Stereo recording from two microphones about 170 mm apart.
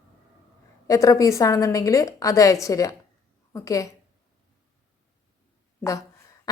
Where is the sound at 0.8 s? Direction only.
20° left (ahead or behind).